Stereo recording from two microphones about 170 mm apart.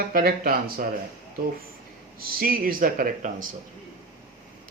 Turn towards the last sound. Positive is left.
turn(degrees=-55)  # may be behind; listen again after turning